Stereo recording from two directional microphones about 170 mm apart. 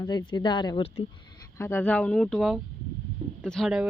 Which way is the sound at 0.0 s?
25° left (ahead or behind).